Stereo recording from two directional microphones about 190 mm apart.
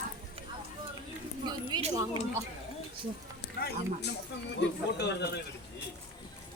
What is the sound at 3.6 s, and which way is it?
Speech, 55° left (ahead or behind).